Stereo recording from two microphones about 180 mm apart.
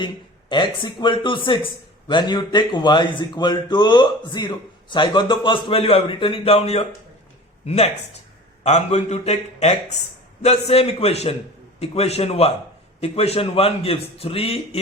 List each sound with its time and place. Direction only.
0.0 s a man's voice: 25° left (ahead or behind)